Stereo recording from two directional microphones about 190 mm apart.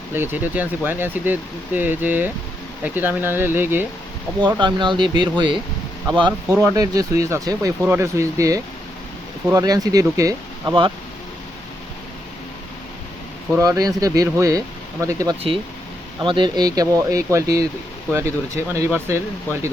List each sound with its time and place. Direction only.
0.1 s speech: 10° right (ahead or behind)
4.4 s speech: 25° right (ahead or behind)
13.5 s speech: 20° right (ahead or behind)